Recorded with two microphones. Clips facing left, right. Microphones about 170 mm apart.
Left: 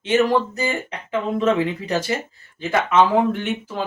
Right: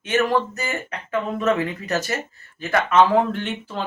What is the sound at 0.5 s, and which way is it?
Speech, 15° left (ahead or behind).